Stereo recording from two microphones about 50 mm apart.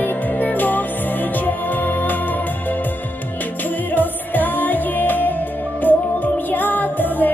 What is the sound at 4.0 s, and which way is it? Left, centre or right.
Music, left.